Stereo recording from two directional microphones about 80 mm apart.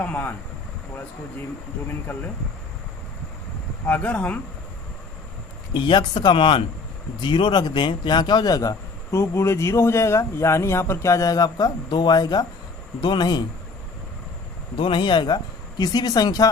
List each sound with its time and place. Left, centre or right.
0.0 s speech: left
2.1 s speech: left
3.8 s speech: centre
5.7 s speech: left
9.1 s speech: left
14.8 s speech: left
15.8 s speech: left